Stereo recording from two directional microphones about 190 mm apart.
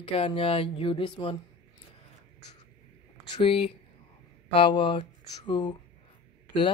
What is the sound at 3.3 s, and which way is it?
Speech, 25° left (ahead or behind).